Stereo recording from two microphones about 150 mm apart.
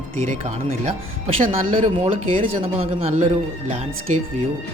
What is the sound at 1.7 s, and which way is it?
Speech, 40° right (ahead or behind).